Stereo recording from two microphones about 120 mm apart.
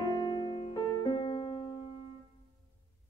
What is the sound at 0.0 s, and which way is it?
Music, 45° left (ahead or behind).